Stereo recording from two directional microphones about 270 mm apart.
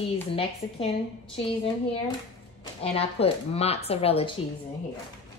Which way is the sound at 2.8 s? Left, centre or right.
Left.